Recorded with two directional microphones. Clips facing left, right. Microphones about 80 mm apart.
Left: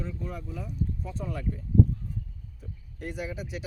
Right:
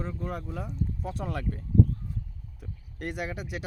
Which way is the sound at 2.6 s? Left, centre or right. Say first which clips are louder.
Right 2 dB; right.